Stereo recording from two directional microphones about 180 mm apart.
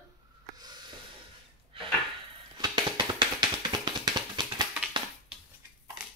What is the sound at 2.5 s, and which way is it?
Music, 25° right (ahead or behind).